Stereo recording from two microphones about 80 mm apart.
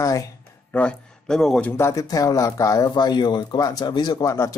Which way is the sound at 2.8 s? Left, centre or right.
Left.